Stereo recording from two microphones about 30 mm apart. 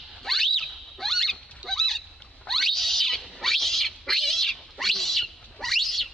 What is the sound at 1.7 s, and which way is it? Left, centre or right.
Goose, centre.